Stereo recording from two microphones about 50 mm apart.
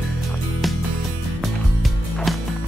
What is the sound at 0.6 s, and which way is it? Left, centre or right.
Music, centre.